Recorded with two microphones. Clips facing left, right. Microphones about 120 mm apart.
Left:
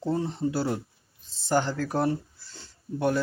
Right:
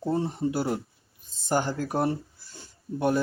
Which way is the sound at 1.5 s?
15° right (ahead or behind).